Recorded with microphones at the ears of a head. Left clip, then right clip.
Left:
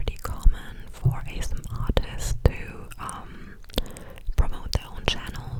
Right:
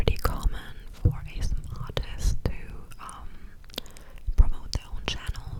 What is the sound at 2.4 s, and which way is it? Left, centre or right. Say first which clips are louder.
Whispering: left 13 dB; left.